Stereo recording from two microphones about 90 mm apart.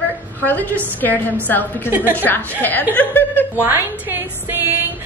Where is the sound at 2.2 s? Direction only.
20° left (ahead or behind).